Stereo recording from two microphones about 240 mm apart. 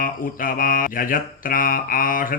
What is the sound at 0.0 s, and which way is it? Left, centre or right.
Mantra, left.